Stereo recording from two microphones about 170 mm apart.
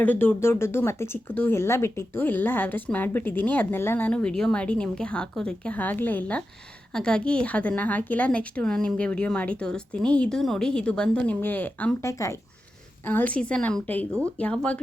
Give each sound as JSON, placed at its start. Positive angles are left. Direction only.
{"t": 0.0, "sound": "speech", "side_deg": 10}
{"t": 14.1, "sound": "speech", "side_deg": -15}
{"t": 14.3, "sound": "speech", "side_deg": 5}